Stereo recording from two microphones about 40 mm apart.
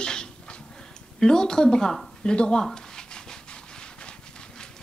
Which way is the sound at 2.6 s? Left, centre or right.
Centre.